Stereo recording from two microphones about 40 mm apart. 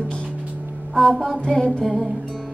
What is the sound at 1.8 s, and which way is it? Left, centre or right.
Music, centre.